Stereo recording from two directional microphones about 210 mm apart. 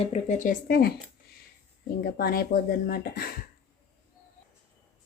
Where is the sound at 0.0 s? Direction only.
35° left (ahead or behind).